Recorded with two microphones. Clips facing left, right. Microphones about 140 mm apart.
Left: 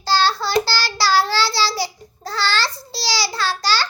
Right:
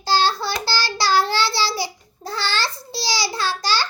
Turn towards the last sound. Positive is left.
turn(degrees=-20)  # may be behind; listen again after turning